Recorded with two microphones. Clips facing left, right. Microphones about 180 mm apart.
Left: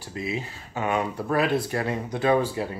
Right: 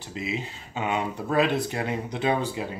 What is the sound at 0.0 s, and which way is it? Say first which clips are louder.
Speech: left 1 dB; 20° right (ahead or behind).